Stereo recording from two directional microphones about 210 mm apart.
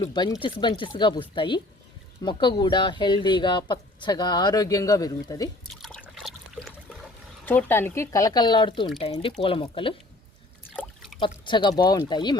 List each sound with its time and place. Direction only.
0.0 s speech: 20° left (ahead or behind)
5.8 s liquid: centre (ahead or behind)
7.4 s speech: 10° left (ahead or behind)
10.8 s trickle: centre (ahead or behind)
11.2 s speech: 25° left (ahead or behind)